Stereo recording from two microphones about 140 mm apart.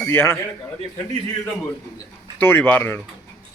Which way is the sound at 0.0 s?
15° left (ahead or behind).